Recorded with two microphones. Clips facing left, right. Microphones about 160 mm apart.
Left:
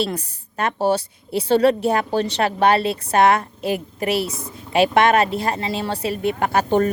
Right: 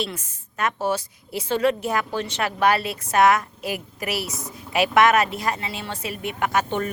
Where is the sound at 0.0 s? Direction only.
35° left (ahead or behind).